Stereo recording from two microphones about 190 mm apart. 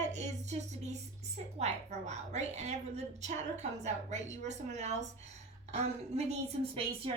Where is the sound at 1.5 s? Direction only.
35° right (ahead or behind).